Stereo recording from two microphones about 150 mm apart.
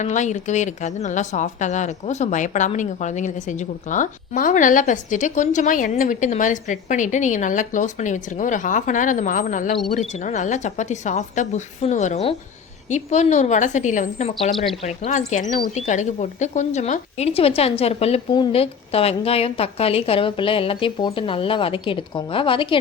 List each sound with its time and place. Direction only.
0.0 s a woman's voice: 55° left (ahead or behind); by 22.8 s 35° left (ahead or behind)